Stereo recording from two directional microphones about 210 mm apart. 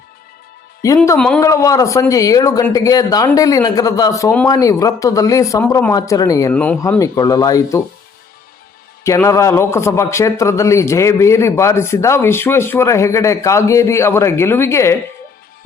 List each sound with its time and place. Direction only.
1.0 s speech: 5° left (ahead or behind)
1.4 s speech: 15° left (ahead or behind)
9.0 s speech: 15° left (ahead or behind)